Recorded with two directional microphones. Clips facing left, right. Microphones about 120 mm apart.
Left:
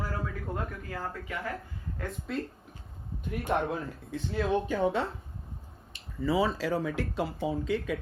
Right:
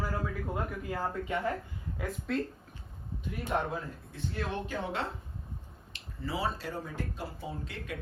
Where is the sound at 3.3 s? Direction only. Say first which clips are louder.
Left 3 dB; 60° left (ahead or behind).